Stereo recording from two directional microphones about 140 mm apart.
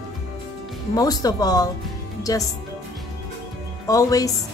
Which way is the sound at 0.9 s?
25° left (ahead or behind).